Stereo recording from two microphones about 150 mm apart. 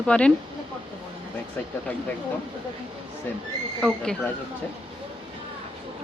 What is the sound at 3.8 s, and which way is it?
Speech, 5° left (ahead or behind).